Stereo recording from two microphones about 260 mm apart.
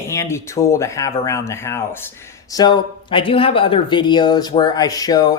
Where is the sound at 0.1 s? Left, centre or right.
Centre.